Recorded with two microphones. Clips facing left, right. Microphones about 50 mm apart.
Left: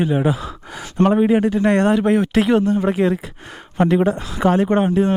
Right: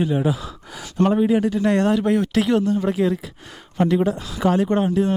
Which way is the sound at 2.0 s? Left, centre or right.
Left.